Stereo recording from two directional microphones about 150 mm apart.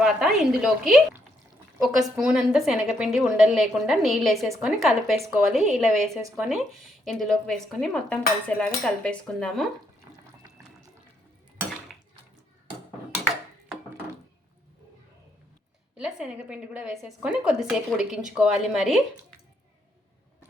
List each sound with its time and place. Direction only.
0.0 s speech: centre (ahead or behind)
2.1 s speech: 5° right (ahead or behind)
10.1 s music: 25° right (ahead or behind)
16.0 s a woman's voice: 5° right (ahead or behind)